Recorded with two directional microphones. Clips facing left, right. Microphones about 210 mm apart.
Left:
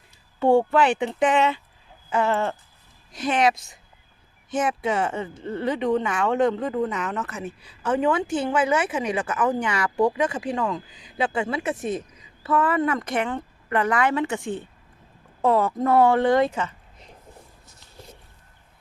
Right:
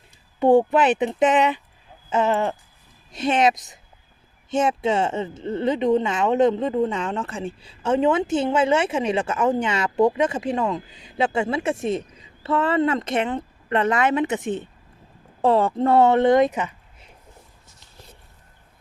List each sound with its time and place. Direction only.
0.3 s speech: 15° right (ahead or behind)